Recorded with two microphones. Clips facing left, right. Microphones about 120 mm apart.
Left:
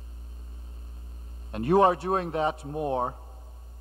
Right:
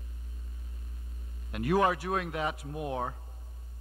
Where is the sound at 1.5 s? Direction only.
30° left (ahead or behind).